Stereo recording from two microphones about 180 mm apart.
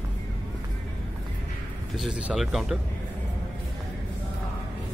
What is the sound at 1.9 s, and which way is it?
Speech, 5° right (ahead or behind).